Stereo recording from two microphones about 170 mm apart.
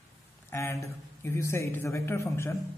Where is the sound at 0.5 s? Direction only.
15° left (ahead or behind).